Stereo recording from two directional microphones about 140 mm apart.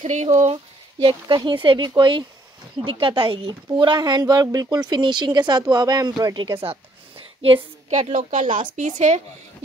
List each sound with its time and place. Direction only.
0.0 s speech: 55° right (ahead or behind)
0.9 s speech: 35° right (ahead or behind)
7.9 s speech: 55° right (ahead or behind)
8.3 s speech: 70° right (ahead or behind)